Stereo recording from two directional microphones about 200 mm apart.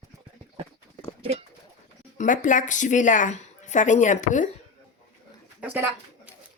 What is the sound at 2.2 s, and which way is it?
A woman's voice, 40° left (ahead or behind).